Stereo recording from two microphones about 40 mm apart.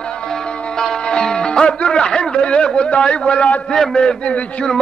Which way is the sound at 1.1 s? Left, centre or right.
Centre.